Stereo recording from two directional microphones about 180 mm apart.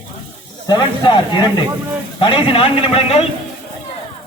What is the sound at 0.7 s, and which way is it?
A man's voice, 25° left (ahead or behind).